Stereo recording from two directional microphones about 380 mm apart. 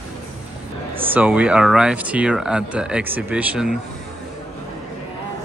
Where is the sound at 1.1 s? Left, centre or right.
Centre.